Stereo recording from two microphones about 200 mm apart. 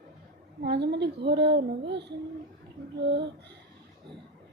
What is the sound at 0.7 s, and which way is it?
Speech, 55° right (ahead or behind).